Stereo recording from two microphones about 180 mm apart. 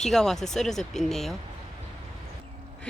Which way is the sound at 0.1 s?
Centre (ahead or behind).